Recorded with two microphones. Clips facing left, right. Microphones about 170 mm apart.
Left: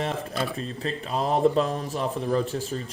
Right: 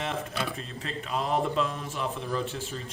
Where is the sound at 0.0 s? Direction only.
35° left (ahead or behind).